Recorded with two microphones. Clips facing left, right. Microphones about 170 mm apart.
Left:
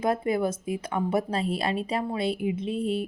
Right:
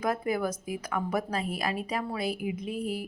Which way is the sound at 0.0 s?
25° left (ahead or behind).